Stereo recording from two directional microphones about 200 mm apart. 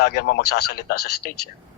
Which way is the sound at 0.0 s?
50° left (ahead or behind).